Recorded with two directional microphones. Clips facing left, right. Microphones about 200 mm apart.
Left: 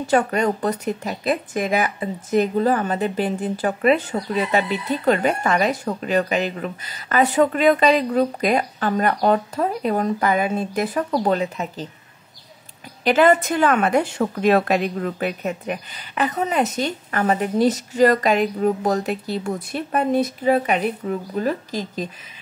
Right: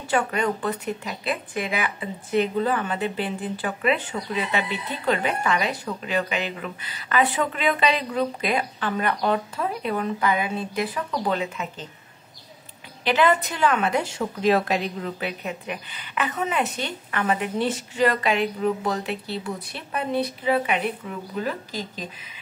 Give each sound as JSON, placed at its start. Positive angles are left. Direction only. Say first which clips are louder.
{"t": 0.0, "sound": "speech", "louder": "left 5 dB", "side_deg": 40}
{"t": 13.0, "sound": "a woman's voice", "louder": "left 5 dB", "side_deg": 45}